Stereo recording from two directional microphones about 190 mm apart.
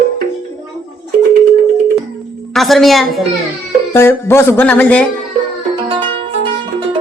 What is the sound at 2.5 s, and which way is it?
Speech, centre (ahead or behind).